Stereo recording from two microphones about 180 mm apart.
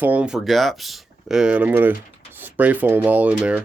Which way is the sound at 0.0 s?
10° right (ahead or behind).